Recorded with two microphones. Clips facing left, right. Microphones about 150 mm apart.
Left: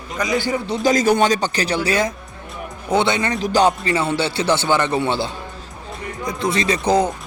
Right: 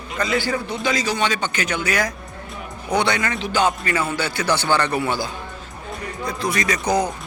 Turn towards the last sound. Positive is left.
turn(degrees=25)  # may be behind; listen again after turning